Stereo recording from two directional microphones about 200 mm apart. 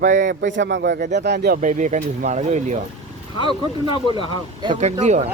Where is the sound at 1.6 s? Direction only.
40° right (ahead or behind).